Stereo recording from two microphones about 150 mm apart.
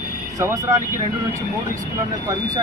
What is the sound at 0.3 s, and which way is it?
Speech, 20° right (ahead or behind).